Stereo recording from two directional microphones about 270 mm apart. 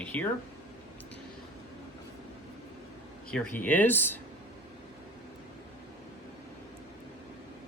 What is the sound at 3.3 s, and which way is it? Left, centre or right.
Speech, centre.